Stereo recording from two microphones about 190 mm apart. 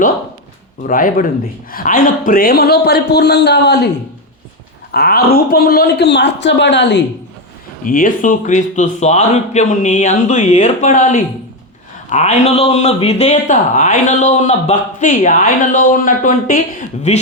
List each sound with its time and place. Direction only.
0.9 s a man's voice: 45° left (ahead or behind); by 3.8 s 60° left (ahead or behind)
4.9 s a man's voice: 55° left (ahead or behind)
7.9 s a man's voice: 45° left (ahead or behind)